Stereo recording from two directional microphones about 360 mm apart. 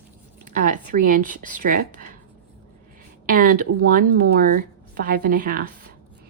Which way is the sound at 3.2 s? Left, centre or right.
Right.